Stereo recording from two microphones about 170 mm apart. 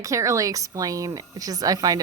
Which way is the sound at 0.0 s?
20° right (ahead or behind).